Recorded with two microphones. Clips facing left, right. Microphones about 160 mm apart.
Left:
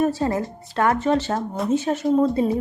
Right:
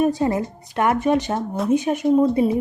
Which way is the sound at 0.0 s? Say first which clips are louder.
Right 2 dB; 15° right (ahead or behind).